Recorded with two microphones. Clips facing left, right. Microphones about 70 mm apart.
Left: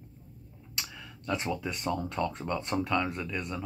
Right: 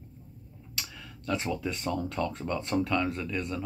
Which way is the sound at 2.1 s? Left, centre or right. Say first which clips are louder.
Even; left.